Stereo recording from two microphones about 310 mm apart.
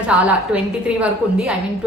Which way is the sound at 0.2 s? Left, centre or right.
Centre.